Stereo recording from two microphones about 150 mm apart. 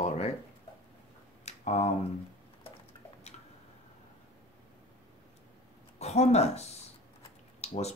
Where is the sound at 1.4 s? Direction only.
45° left (ahead or behind).